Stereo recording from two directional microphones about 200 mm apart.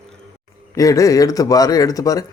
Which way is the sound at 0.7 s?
15° left (ahead or behind).